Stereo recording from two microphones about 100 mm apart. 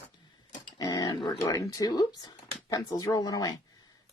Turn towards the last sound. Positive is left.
turn(degrees=35)  # may be behind; listen again after turning